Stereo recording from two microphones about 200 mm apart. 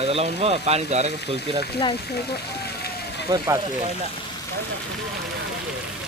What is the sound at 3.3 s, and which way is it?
Speech, 20° right (ahead or behind).